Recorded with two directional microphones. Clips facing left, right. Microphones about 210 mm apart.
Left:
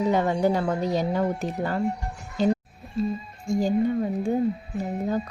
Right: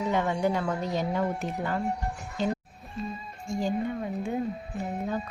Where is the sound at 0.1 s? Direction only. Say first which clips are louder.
Left 2 dB; 40° left (ahead or behind).